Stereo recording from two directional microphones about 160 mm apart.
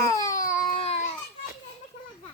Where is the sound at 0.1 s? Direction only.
20° left (ahead or behind).